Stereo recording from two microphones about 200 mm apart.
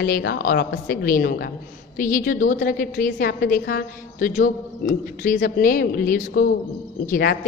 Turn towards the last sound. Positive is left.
turn(degrees=50)  # may be behind; listen again after turning